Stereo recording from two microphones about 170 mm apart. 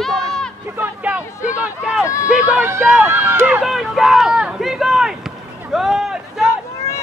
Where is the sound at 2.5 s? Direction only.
10° right (ahead or behind).